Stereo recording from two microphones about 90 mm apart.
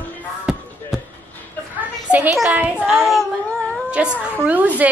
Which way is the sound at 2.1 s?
15° right (ahead or behind).